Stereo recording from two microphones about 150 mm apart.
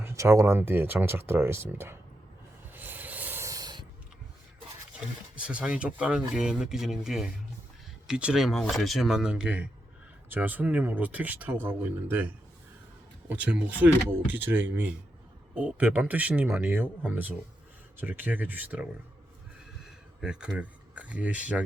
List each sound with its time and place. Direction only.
0.0 s speech: 20° right (ahead or behind)
2.7 s rub: 10° right (ahead or behind); by 3.8 s 25° right (ahead or behind)
5.4 s speech: 10° right (ahead or behind)
19.8 s a sound: 5° right (ahead or behind)